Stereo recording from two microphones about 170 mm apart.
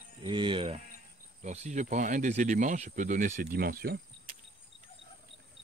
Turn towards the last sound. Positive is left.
turn(degrees=-60)  # may be behind; listen again after turning